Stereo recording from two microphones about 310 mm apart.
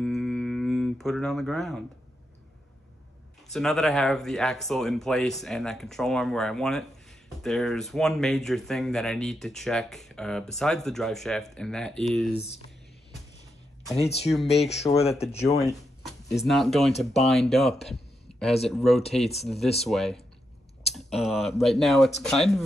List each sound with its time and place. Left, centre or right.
0.0 s a sound: centre
3.5 s speech: centre
13.9 s speech: centre
14.3 s speech: centre
14.6 s speech: centre
15.4 s speech: centre